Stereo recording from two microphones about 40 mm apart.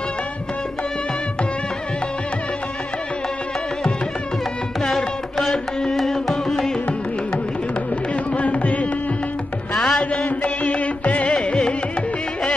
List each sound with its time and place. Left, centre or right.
4.8 s music: centre
8.4 s carnatic music: left
9.8 s music: centre
10.4 s music: left